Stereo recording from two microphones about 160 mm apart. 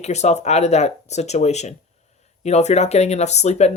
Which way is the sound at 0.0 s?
45° left (ahead or behind).